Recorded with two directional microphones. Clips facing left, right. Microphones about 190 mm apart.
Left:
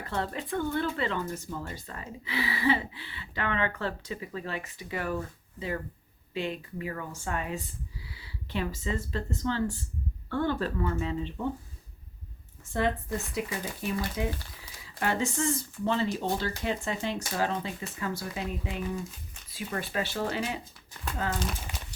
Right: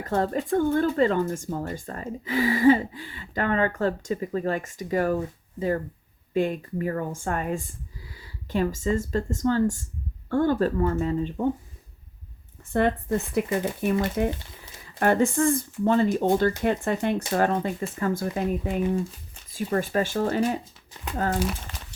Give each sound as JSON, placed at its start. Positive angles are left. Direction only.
{"t": 0.0, "sound": "speech", "side_deg": -45}
{"t": 12.7, "sound": "speech", "side_deg": -55}
{"t": 21.7, "sound": "a sound", "side_deg": 15}